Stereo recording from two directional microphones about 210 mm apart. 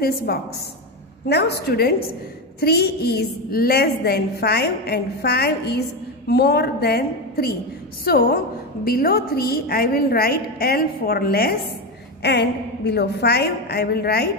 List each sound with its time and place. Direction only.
0.3 s a woman's voice: 50° left (ahead or behind)